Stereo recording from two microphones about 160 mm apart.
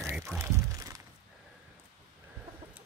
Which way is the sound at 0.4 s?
20° right (ahead or behind).